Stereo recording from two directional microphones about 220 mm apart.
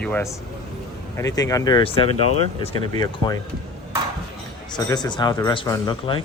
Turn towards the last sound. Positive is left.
turn(degrees=20)  # may be behind; listen again after turning